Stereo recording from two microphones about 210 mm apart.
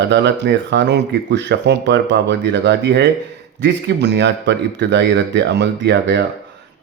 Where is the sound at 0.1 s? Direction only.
55° right (ahead or behind).